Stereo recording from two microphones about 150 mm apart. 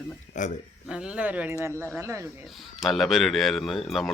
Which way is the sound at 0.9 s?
5° right (ahead or behind).